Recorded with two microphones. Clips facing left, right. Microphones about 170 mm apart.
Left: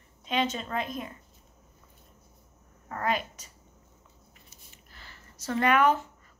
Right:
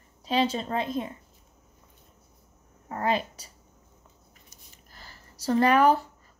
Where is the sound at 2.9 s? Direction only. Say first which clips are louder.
Right 3 dB; 30° right (ahead or behind).